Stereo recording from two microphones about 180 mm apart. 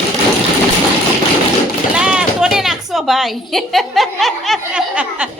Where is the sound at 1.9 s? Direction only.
5° right (ahead or behind).